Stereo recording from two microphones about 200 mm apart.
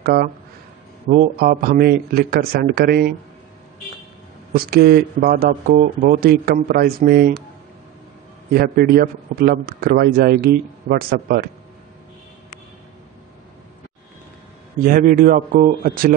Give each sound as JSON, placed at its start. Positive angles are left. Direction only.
{"t": 0.0, "sound": "a man's voice", "side_deg": -45}
{"t": 4.6, "sound": "a man's voice", "side_deg": -50}
{"t": 8.5, "sound": "a man's voice", "side_deg": -50}
{"t": 14.9, "sound": "a man's voice", "side_deg": -45}